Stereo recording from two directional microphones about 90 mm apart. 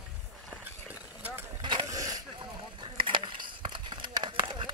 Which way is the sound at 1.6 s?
60° right (ahead or behind).